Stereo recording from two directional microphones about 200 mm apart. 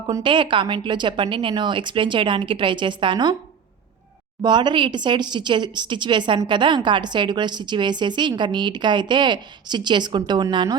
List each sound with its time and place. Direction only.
0.1 s speech: 25° right (ahead or behind)
4.4 s speech: 25° right (ahead or behind)